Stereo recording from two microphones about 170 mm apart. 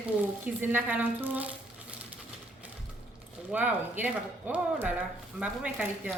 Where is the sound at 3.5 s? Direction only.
10° right (ahead or behind).